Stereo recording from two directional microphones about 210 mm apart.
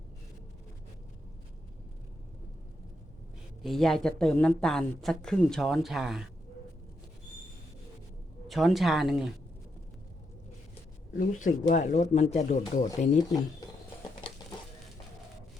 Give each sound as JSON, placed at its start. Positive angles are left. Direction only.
{"t": 3.6, "sound": "speech", "side_deg": 0}
{"t": 8.4, "sound": "speech", "side_deg": 0}
{"t": 11.2, "sound": "speech", "side_deg": 40}